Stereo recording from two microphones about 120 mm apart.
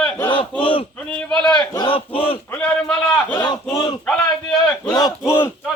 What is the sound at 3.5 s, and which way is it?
Battle cry, 40° left (ahead or behind).